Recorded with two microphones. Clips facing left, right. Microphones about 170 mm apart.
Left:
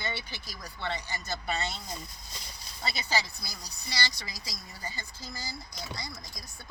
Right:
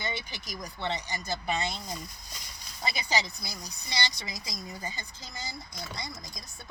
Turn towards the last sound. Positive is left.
turn(degrees=-20)  # may be behind; listen again after turning